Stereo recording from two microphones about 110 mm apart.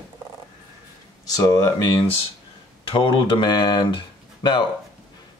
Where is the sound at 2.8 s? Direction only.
50° left (ahead or behind).